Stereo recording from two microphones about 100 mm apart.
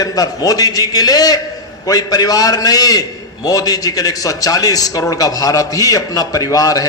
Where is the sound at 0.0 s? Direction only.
40° left (ahead or behind).